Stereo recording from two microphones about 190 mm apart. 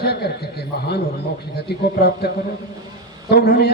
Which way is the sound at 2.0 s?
55° left (ahead or behind).